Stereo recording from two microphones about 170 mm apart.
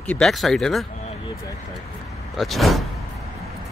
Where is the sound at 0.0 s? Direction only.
5° left (ahead or behind).